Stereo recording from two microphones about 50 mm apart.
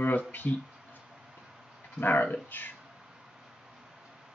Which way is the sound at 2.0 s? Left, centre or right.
Left.